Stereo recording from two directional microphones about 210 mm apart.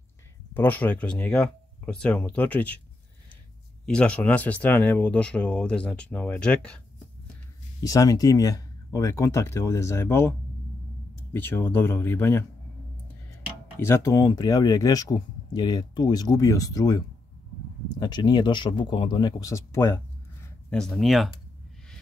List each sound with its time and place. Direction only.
0.6 s speech: 10° left (ahead or behind)
3.8 s speech: 5° left (ahead or behind)
7.8 s speech: 15° left (ahead or behind)
11.3 s speech: 10° left (ahead or behind)
13.7 s speech: 10° left (ahead or behind)